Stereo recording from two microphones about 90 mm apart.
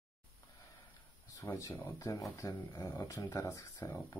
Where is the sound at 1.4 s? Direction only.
30° left (ahead or behind).